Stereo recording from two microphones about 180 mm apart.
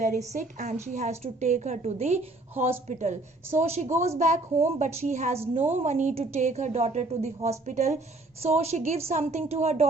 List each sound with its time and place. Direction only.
0.0 s a woman's voice: 40° right (ahead or behind)